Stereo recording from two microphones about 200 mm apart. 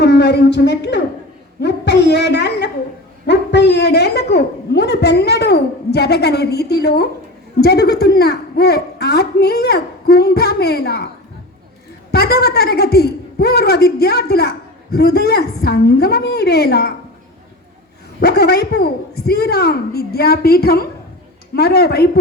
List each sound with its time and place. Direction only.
0.0 s a woman's voice: 60° left (ahead or behind)
12.1 s a woman's voice: 50° left (ahead or behind)
18.2 s a woman's voice: 55° left (ahead or behind)